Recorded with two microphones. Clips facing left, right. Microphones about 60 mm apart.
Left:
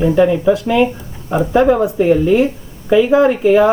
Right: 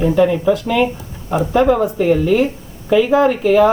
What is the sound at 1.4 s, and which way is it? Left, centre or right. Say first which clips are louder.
Speech: left 2 dB; left.